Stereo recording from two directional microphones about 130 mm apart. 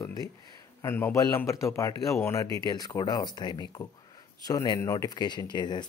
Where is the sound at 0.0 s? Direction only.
30° left (ahead or behind).